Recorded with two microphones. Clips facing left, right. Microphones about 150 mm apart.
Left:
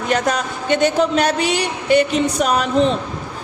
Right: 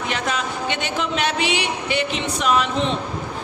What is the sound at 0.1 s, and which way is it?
Speech, 40° left (ahead or behind).